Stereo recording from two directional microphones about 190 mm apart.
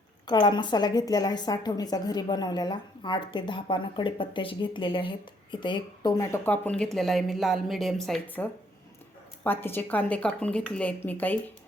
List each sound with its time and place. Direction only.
0.3 s a woman's voice: 25° left (ahead or behind)